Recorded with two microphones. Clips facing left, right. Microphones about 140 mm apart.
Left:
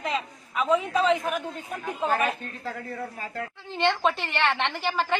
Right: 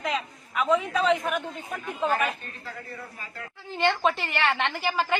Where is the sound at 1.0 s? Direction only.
Centre (ahead or behind).